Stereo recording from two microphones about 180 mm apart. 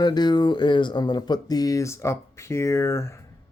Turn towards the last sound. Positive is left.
turn(degrees=15)  # may be behind; listen again after turning